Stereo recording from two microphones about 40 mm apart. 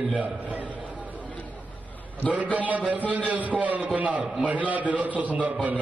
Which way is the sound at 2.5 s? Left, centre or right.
Right.